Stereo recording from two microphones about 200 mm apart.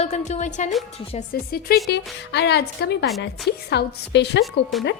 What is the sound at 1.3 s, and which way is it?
A woman's voice, 50° left (ahead or behind).